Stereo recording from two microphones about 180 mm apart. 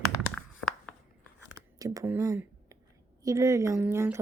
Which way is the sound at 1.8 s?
20° right (ahead or behind).